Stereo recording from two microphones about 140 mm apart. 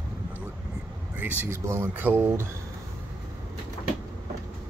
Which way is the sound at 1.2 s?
15° right (ahead or behind).